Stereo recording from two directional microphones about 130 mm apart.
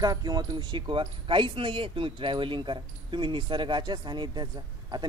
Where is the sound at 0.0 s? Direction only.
30° right (ahead or behind).